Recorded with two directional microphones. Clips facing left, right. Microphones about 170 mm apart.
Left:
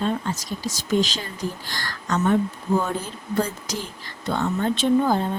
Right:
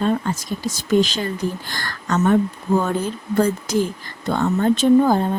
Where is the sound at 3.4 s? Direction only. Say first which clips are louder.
Right 8 dB; 50° right (ahead or behind).